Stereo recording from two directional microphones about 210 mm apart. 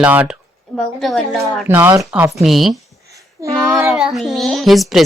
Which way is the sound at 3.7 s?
Centre (ahead or behind).